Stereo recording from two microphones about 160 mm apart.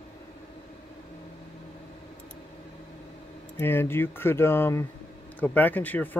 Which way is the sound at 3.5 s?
15° left (ahead or behind).